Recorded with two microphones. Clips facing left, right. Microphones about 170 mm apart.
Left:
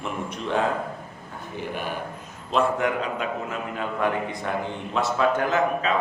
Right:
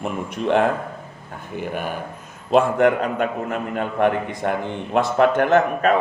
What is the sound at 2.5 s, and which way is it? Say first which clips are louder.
A man's voice: right 7 dB; 60° right (ahead or behind).